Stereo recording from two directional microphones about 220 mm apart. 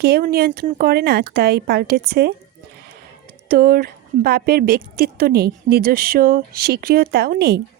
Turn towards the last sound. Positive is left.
turn(degrees=-45)  # may be behind; listen again after turning